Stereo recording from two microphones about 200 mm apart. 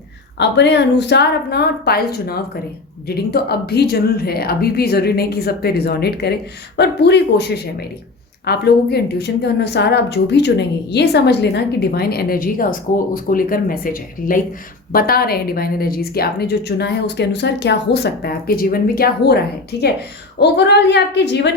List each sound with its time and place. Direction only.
0.3 s a woman's voice: 60° left (ahead or behind)